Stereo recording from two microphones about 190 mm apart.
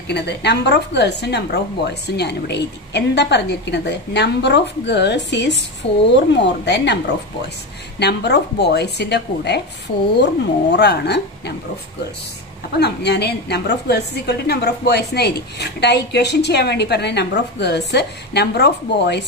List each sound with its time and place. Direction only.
0.1 s a woman's voice: 60° left (ahead or behind)
12.7 s a woman's voice: 60° left (ahead or behind)